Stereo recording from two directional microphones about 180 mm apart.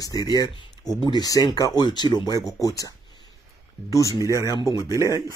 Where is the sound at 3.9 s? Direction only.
20° left (ahead or behind).